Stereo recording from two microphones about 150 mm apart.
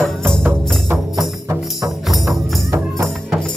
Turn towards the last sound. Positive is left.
turn(degrees=-20)  # may be behind; listen again after turning